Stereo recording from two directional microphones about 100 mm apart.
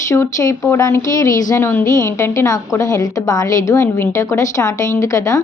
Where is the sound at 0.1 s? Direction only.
35° left (ahead or behind).